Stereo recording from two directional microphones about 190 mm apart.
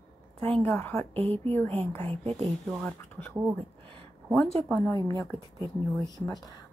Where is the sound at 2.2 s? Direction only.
35° right (ahead or behind).